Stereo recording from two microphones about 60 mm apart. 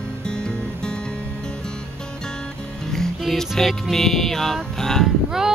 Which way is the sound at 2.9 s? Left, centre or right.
Centre.